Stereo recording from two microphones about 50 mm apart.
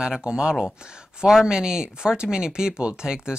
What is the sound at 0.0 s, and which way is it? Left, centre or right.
Speech, centre.